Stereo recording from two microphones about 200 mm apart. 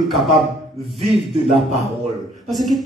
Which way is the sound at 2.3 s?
Centre (ahead or behind).